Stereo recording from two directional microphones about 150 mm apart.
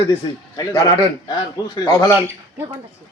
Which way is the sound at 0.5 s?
25° left (ahead or behind).